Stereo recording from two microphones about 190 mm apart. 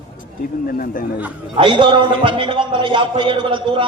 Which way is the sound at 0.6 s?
50° left (ahead or behind).